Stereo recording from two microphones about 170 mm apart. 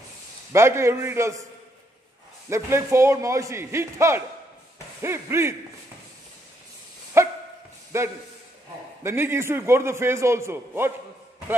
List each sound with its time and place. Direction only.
0.5 s a man's voice: 15° right (ahead or behind)
2.5 s a man's voice: 15° right (ahead or behind)
7.2 s dog: 15° right (ahead or behind)
7.9 s a man's voice: 15° right (ahead or behind)